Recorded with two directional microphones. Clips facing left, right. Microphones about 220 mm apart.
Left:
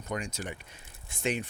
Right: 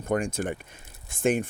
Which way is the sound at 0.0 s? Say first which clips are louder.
Right 9 dB; 50° right (ahead or behind).